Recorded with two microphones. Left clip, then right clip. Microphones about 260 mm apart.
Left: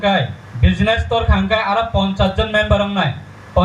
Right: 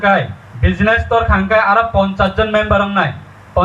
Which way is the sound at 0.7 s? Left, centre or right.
Left.